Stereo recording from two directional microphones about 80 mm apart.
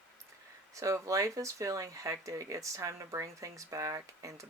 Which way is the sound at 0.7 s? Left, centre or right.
Right.